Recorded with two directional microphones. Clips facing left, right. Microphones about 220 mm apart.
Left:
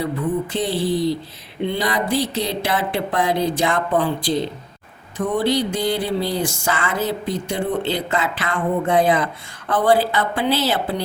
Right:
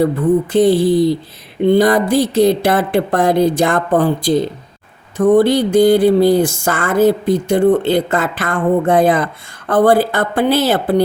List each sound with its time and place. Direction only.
0.5 s speech: 50° right (ahead or behind)